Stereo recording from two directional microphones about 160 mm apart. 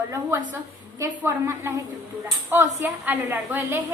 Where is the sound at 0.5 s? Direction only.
20° right (ahead or behind).